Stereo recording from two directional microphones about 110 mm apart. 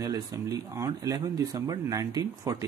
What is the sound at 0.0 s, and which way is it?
Speech, 35° right (ahead or behind).